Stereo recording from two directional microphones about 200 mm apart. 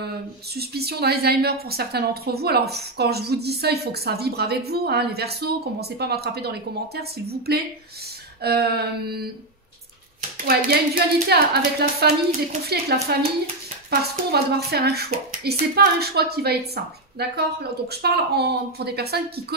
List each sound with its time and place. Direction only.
0.6 s a woman's voice: 50° right (ahead or behind)
10.3 s a woman's voice: 50° right (ahead or behind)